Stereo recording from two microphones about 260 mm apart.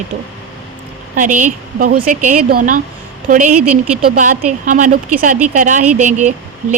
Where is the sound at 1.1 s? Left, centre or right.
Right.